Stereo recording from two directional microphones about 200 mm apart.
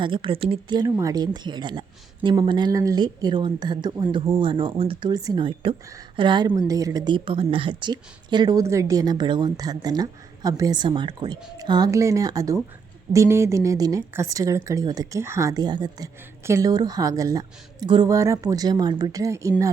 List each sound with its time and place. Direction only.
0.0 s a woman's voice: 25° right (ahead or behind)